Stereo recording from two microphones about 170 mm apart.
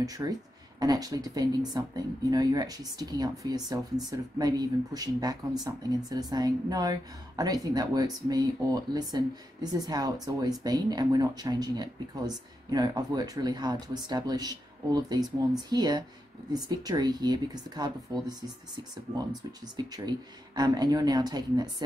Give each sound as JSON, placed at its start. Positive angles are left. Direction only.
{"t": 0.0, "sound": "speech", "side_deg": -20}
{"t": 19.6, "sound": "speech", "side_deg": -25}